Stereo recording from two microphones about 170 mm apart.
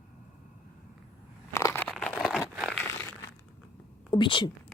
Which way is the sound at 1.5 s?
15° left (ahead or behind).